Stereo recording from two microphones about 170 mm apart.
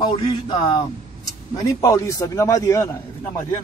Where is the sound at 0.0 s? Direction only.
30° left (ahead or behind).